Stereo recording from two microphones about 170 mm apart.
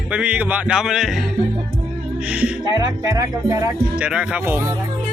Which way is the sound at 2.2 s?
5° right (ahead or behind).